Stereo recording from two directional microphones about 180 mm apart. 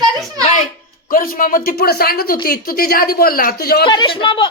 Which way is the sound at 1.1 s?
50° left (ahead or behind).